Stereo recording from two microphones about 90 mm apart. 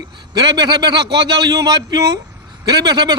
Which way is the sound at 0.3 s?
50° right (ahead or behind).